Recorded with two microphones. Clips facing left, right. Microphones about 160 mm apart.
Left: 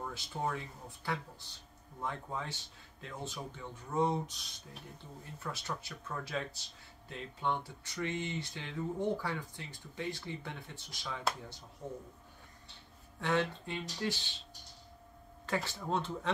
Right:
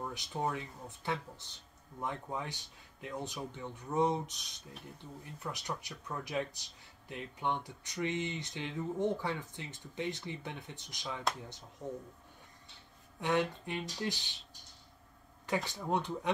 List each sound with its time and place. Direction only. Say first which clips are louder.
0.0 s speech: right 1 dB; 15° right (ahead or behind)
5.4 s speech: even; 15° right (ahead or behind)
13.2 s speech: right 1 dB; 15° right (ahead or behind)
15.4 s speech: right 1 dB; 15° right (ahead or behind)